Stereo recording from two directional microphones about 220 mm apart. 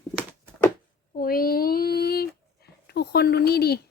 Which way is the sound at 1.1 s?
40° left (ahead or behind).